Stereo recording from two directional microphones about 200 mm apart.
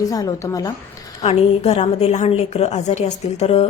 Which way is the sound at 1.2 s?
30° left (ahead or behind).